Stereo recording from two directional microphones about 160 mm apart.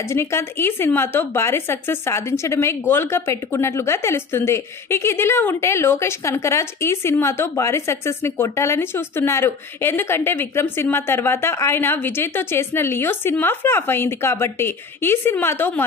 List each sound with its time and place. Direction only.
0.1 s a woman's voice: 15° left (ahead or behind)